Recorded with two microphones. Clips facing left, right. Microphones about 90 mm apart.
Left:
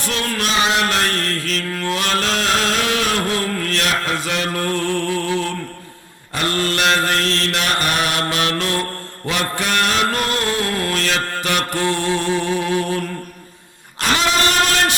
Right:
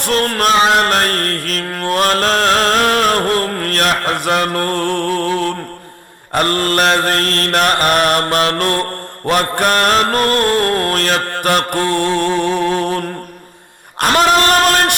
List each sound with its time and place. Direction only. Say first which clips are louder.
0.0 s music: right 7 dB; 55° right (ahead or behind)
6.3 s mantra: right 6 dB; 45° right (ahead or behind)
14.0 s a sound: right 6 dB; 45° right (ahead or behind)